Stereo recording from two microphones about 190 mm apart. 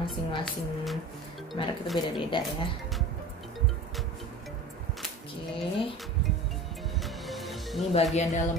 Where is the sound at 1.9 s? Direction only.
25° left (ahead or behind).